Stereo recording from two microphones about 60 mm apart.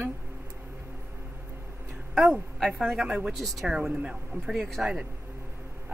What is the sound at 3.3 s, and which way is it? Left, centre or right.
Speech, centre.